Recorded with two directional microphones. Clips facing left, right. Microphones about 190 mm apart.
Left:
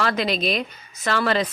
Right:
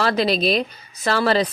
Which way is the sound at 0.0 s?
35° right (ahead or behind).